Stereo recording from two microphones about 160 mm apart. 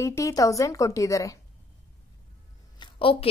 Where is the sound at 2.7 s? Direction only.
30° left (ahead or behind).